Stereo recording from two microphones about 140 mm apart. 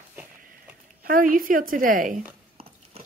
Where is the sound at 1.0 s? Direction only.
85° right.